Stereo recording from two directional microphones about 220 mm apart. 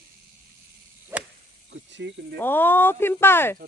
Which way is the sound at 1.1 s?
10° right (ahead or behind).